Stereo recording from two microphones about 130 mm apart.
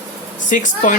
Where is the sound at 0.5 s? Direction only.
75° left (ahead or behind).